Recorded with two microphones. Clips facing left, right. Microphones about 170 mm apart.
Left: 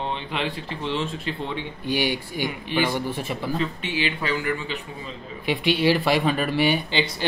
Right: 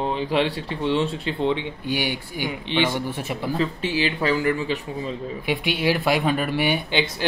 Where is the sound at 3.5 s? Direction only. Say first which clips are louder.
Right 5 dB; 35° right (ahead or behind).